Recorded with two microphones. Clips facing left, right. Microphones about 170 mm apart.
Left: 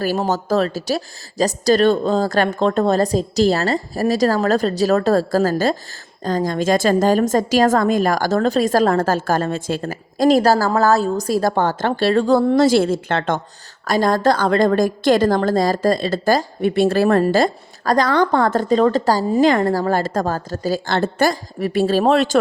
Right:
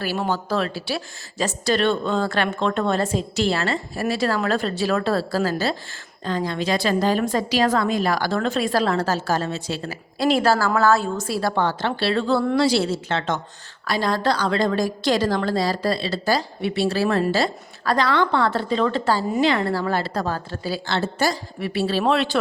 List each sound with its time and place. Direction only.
0.0 s a woman's voice: 40° left (ahead or behind)